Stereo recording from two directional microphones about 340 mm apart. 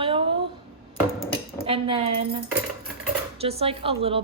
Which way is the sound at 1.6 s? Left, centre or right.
Centre.